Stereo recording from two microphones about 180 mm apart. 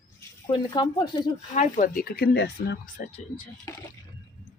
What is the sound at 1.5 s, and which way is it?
Speech, 45° left (ahead or behind).